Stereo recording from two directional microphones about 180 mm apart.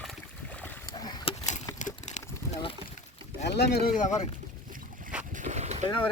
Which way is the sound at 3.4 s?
70° left (ahead or behind).